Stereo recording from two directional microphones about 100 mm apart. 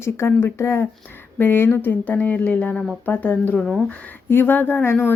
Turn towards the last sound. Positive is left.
turn(degrees=25)  # may be behind; listen again after turning